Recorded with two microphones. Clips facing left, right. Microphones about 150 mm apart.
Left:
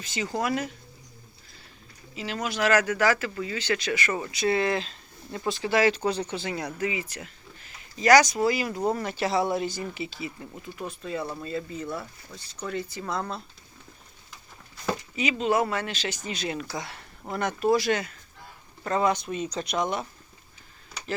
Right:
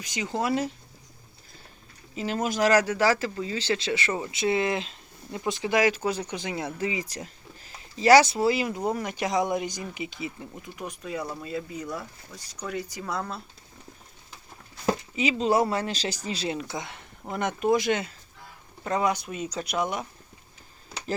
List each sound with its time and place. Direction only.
0.0 s speech: 15° right (ahead or behind)
2.1 s speech: 45° right (ahead or behind); by 13.2 s 10° right (ahead or behind)
15.1 s speech: 30° right (ahead or behind); by 20.1 s 10° right (ahead or behind)